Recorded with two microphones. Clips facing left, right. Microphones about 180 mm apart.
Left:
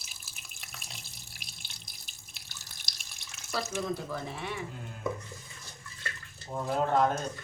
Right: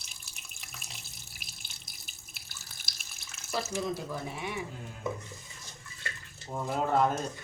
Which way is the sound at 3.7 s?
15° right (ahead or behind).